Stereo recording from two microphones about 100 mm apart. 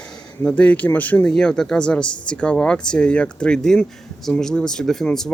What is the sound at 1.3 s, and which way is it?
Speech, 5° left (ahead or behind).